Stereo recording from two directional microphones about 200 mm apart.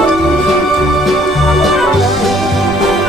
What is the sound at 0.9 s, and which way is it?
Music, centre (ahead or behind).